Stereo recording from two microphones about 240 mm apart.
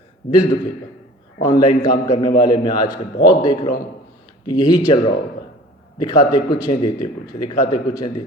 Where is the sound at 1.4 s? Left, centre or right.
Centre.